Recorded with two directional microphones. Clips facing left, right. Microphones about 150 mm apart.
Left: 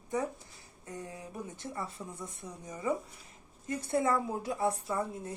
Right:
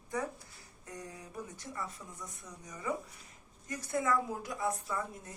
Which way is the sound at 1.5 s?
25° left (ahead or behind).